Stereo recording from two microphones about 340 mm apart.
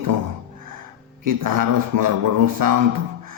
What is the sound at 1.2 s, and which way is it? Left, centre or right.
Speech, right.